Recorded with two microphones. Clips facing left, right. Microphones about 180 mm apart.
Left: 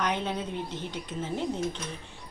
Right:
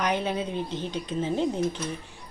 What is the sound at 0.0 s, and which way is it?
A woman's voice, 10° right (ahead or behind).